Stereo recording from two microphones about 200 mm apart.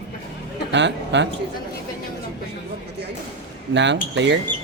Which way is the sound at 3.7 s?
60° right (ahead or behind).